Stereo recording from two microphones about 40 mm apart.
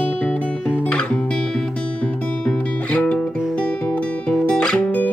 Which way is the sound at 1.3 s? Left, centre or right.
Centre.